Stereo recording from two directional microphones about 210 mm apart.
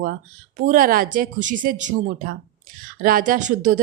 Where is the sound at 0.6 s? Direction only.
40° right (ahead or behind).